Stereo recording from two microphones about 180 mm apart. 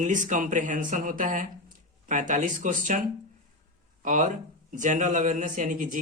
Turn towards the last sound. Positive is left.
turn(degrees=-45)  # may be behind; listen again after turning